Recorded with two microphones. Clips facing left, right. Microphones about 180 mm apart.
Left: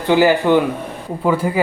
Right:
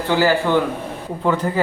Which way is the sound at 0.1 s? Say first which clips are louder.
Left 4 dB; 15° left (ahead or behind).